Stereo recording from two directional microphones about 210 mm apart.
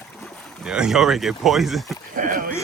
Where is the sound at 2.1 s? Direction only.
40° right (ahead or behind).